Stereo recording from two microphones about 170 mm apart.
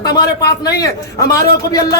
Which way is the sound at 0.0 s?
20° left (ahead or behind).